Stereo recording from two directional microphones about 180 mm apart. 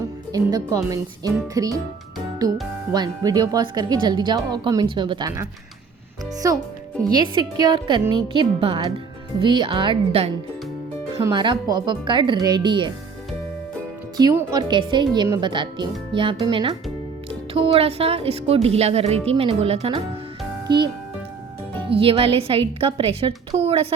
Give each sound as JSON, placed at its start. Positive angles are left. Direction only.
{"t": 0.3, "sound": "speech", "side_deg": -20}
{"t": 6.4, "sound": "a child's voice", "side_deg": -15}
{"t": 14.2, "sound": "a woman's voice", "side_deg": -20}